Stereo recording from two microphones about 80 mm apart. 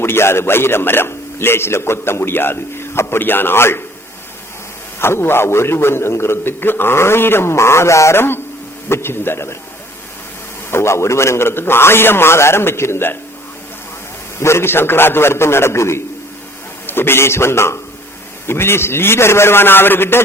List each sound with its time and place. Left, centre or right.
0.0 s a man's voice: left
4.9 s a man's voice: left
10.7 s a man's voice: left
14.3 s a man's voice: left